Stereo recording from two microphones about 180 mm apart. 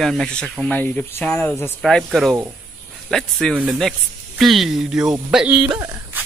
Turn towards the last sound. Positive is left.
turn(degrees=-15)  # may be behind; listen again after turning